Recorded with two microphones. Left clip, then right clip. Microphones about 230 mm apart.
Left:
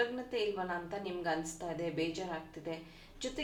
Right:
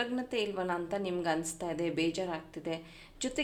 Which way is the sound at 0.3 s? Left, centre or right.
Right.